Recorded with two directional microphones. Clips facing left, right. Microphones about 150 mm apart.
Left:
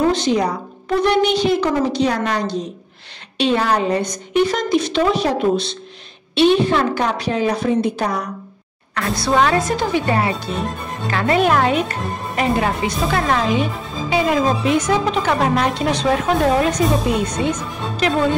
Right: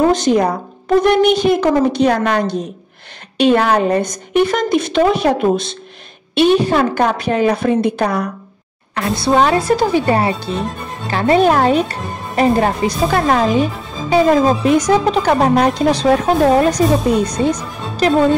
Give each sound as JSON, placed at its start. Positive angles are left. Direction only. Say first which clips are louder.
{"t": 0.1, "sound": "a woman's voice", "louder": "right 4 dB", "side_deg": -45}
{"t": 8.9, "sound": "speech", "louder": "right 3 dB", "side_deg": -25}